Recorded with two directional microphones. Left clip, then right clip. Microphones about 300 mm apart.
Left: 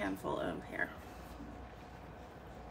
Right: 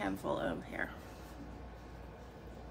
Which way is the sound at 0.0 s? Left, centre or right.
Centre.